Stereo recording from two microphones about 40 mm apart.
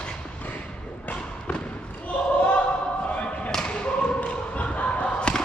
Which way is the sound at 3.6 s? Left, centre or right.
Left.